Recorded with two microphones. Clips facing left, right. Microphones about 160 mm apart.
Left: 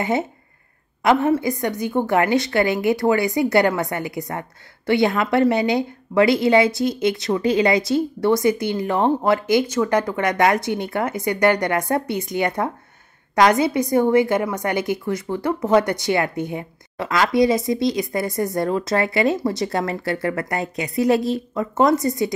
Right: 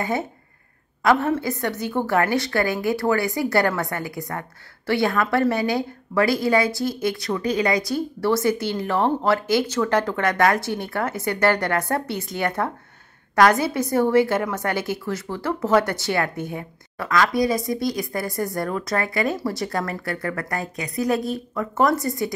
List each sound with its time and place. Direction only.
1.0 s a woman's voice: 15° left (ahead or behind)